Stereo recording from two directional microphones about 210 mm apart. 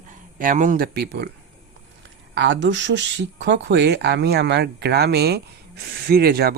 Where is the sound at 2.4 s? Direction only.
60° right (ahead or behind).